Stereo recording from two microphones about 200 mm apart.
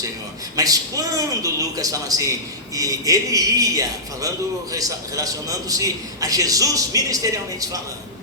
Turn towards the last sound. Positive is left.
turn(degrees=-15)  # may be behind; listen again after turning